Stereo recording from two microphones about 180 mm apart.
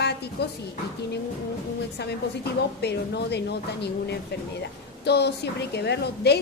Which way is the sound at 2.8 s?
65° left (ahead or behind).